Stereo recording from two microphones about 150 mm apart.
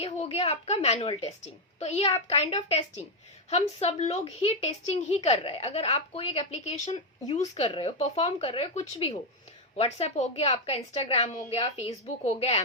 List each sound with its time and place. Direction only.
0.0 s a woman's voice: 45° left (ahead or behind)